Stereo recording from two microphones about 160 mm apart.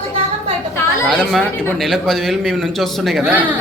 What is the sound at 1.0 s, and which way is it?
Speech, 5° left (ahead or behind).